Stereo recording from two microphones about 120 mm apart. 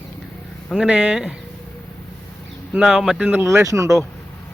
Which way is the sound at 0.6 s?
5° right (ahead or behind).